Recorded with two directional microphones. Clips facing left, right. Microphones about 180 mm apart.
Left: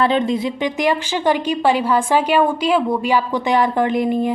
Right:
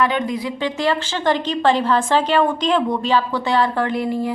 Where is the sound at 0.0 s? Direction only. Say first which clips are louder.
Left 3 dB; 30° left (ahead or behind).